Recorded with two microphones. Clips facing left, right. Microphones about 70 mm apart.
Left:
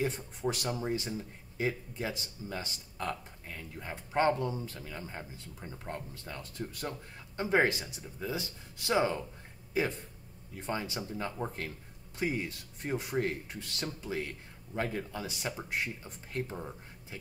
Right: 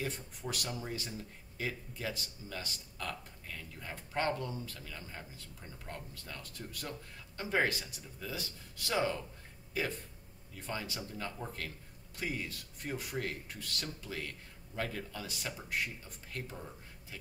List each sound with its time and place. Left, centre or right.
0.0 s speech: left